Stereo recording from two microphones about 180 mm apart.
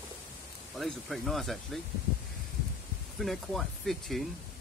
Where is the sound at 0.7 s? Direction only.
Centre (ahead or behind).